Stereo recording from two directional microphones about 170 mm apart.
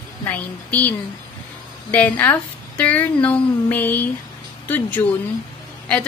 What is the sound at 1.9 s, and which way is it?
A woman's voice, 10° left (ahead or behind).